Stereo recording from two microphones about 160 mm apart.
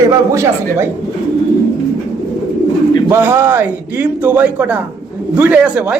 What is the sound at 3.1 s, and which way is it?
Speech, 15° right (ahead or behind).